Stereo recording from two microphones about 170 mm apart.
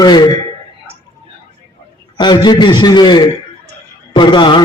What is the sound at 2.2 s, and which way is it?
A man's voice, 25° left (ahead or behind).